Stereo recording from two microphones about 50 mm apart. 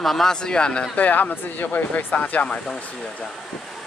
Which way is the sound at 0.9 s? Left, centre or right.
Left.